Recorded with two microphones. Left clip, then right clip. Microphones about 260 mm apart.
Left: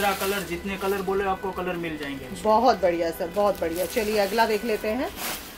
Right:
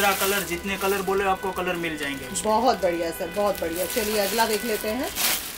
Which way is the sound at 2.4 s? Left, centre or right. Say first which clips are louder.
Left 2 dB; left.